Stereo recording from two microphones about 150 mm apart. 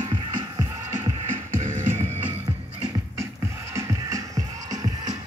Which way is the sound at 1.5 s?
55° right (ahead or behind).